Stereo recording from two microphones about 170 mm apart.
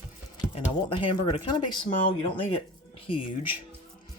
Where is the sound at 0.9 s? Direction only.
30° left (ahead or behind).